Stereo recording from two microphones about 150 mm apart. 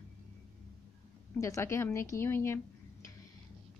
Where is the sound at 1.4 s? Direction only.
20° left (ahead or behind).